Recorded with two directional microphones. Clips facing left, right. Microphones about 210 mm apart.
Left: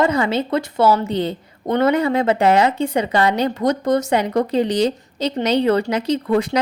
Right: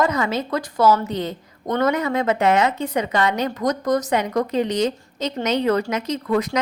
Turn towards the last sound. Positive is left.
turn(degrees=30)  # may be behind; listen again after turning